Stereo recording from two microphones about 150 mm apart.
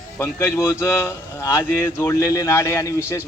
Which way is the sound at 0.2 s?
20° left (ahead or behind).